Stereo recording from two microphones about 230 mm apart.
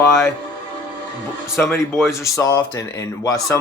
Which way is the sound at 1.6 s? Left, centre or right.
Centre.